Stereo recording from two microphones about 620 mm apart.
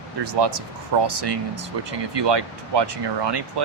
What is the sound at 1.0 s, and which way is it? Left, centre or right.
Speech, right.